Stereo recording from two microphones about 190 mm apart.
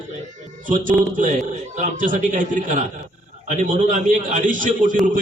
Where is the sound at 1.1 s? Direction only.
40° right (ahead or behind).